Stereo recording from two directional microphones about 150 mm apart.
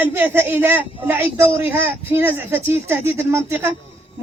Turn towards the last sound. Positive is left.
turn(degrees=-15)  # may be behind; listen again after turning